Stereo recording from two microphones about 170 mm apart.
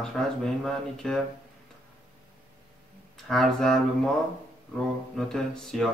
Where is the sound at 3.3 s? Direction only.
Centre (ahead or behind).